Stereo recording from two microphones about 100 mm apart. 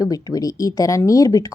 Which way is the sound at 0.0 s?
40° left (ahead or behind).